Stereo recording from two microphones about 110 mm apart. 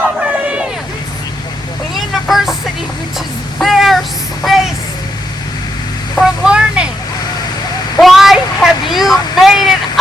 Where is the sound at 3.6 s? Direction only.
Centre (ahead or behind).